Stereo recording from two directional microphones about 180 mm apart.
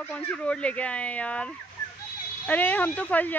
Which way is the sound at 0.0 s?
10° left (ahead or behind).